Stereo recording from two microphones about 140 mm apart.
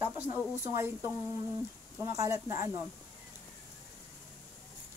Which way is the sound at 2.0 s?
20° right (ahead or behind).